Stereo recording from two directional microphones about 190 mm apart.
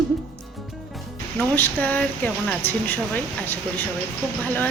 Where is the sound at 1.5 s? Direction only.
10° left (ahead or behind).